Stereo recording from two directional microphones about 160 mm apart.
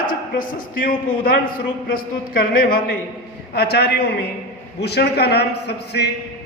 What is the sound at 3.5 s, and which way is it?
A man's voice, 90° left.